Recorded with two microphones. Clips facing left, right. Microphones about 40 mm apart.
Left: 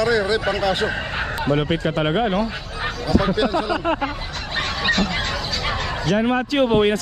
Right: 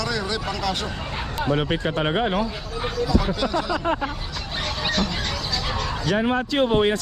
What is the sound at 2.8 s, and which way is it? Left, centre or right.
Speech, left.